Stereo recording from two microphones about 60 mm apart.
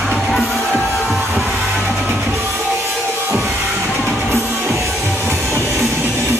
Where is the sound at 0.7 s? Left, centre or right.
Right.